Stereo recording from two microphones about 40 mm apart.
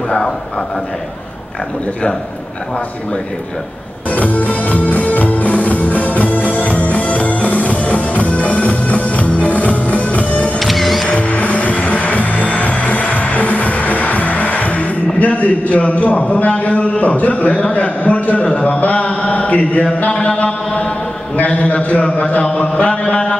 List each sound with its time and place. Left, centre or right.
4.1 s music: left
10.6 s music: centre
11.1 s music: left
17.5 s a man's voice: left
21.4 s a sound: left